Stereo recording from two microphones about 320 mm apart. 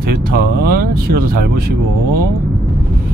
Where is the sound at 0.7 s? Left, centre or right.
Right.